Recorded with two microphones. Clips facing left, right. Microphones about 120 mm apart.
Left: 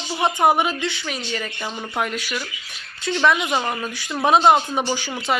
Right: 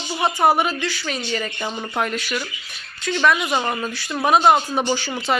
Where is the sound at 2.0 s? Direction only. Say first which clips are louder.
Right 1 dB; 10° left (ahead or behind).